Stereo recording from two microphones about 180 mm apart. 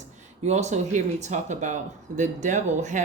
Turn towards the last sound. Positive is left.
turn(degrees=-40)  # may be behind; listen again after turning